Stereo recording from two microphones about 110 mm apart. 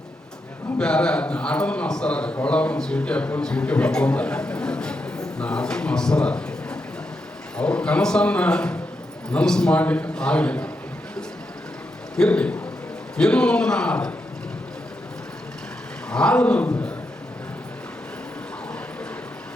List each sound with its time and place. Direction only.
0.8 s a man's voice: 10° left (ahead or behind)
12.1 s a man's voice: 10° left (ahead or behind)
16.0 s speech: 10° left (ahead or behind)